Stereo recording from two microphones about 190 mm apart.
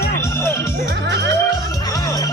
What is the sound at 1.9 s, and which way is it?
Music, 20° left (ahead or behind).